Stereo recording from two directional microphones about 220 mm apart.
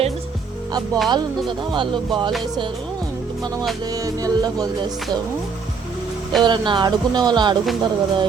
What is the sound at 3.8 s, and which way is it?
Music, 15° right (ahead or behind).